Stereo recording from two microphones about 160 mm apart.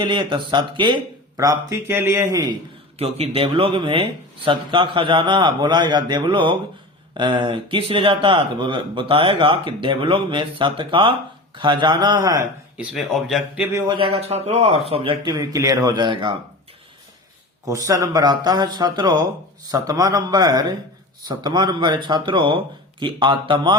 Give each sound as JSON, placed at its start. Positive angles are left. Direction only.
{"t": 0.0, "sound": "speech", "side_deg": -30}
{"t": 3.0, "sound": "speech", "side_deg": -35}
{"t": 12.7, "sound": "speech", "side_deg": -5}
{"t": 13.7, "sound": "speech", "side_deg": -30}
{"t": 17.7, "sound": "speech", "side_deg": -20}